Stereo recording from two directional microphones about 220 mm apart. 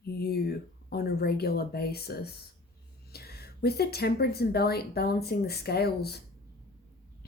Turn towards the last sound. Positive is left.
turn(degrees=45)  # may be behind; listen again after turning